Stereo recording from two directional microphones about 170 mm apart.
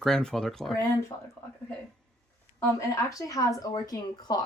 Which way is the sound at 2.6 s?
20° left (ahead or behind).